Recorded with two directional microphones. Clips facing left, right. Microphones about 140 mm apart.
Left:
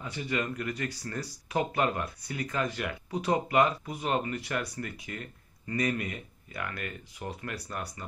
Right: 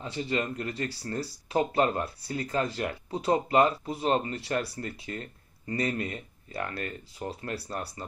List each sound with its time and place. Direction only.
0.0 s speech: 30° right (ahead or behind)